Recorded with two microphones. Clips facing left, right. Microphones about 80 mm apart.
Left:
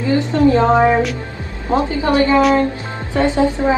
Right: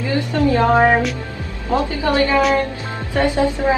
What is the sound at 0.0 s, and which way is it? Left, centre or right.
A woman's voice, left.